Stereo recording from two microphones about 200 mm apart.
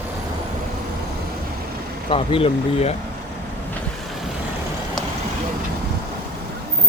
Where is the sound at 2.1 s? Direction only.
25° left (ahead or behind).